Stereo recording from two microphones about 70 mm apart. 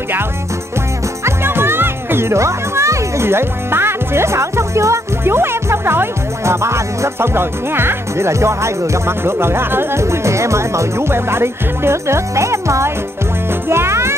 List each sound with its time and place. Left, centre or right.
1.2 s speech: right
13.7 s music: right